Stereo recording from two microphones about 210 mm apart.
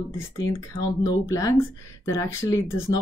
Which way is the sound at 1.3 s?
15° left (ahead or behind).